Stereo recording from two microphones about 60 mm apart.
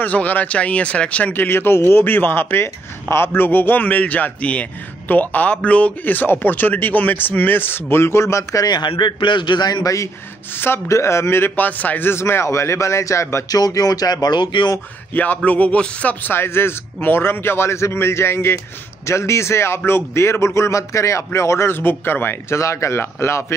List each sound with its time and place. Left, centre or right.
0.0 s speech: left
9.7 s a man's voice: left
10.5 s speech: left
10.9 s speech: left
12.1 s speech: left
13.5 s speech: left
15.1 s speech: left
22.6 s speech: left